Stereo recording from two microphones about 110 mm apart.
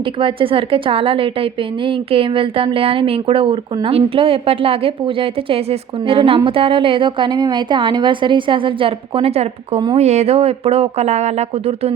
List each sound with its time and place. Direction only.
0.2 s a woman's voice: 50° right (ahead or behind); by 9.8 s 70° right (ahead or behind)
10.0 s speech: 85° right; by 11.9 s 65° right (ahead or behind)